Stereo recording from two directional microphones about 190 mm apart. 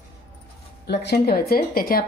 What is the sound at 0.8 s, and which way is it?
A woman's voice, 60° left (ahead or behind).